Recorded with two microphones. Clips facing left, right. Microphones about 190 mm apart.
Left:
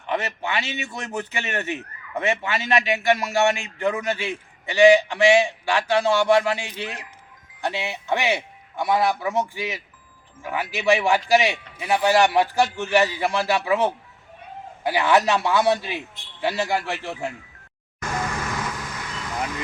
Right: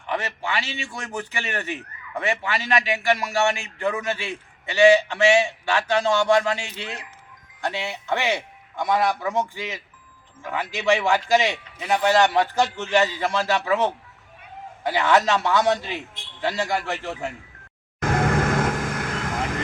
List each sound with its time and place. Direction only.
0.0 s a man's voice: 20° left (ahead or behind)
18.0 s vehicle: 55° right (ahead or behind)